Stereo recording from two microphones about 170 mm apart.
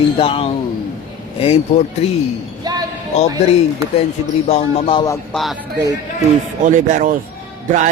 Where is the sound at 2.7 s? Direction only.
20° right (ahead or behind).